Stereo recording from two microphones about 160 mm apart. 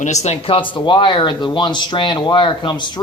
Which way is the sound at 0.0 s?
45° left (ahead or behind).